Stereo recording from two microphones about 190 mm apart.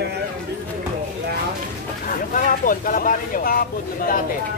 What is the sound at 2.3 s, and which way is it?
Speech, 45° left (ahead or behind).